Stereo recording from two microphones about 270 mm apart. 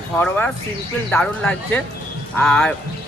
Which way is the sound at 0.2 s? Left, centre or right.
Centre.